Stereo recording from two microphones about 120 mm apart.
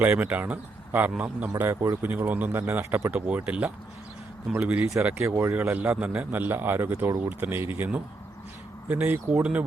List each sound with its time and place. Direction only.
0.0 s a man's voice: 15° right (ahead or behind)